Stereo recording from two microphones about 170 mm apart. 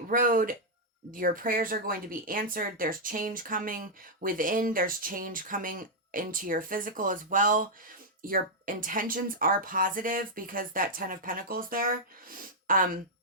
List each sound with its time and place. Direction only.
0.1 s speech: 55° right (ahead or behind)